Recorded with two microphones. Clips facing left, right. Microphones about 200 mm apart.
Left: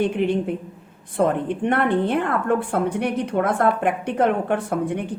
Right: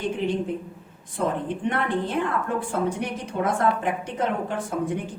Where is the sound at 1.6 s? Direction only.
60° left (ahead or behind).